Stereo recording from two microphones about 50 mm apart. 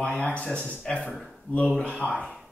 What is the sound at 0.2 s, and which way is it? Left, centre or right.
Speech, left.